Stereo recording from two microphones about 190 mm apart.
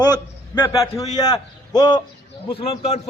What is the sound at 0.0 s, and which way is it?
A man's voice, 20° left (ahead or behind).